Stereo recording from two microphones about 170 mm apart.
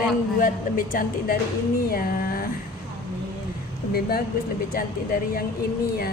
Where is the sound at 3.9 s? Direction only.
65° left (ahead or behind).